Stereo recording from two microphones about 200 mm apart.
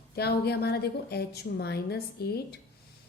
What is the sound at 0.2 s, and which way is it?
A woman's voice, 55° left (ahead or behind).